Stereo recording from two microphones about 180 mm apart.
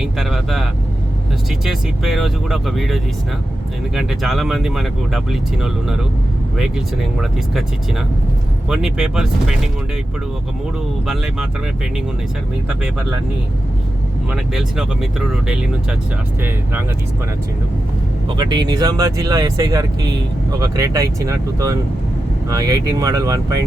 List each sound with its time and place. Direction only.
0.0 s speech: centre (ahead or behind)
8.7 s speech: centre (ahead or behind)
11.0 s speech: centre (ahead or behind)
14.3 s speech: centre (ahead or behind)
18.3 s speech: 25° right (ahead or behind)